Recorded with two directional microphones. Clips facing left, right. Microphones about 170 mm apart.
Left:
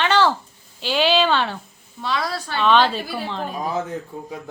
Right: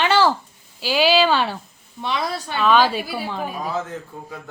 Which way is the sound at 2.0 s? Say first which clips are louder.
Even; 20° right (ahead or behind).